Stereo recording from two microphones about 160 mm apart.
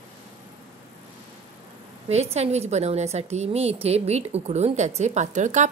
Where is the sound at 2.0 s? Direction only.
40° right (ahead or behind).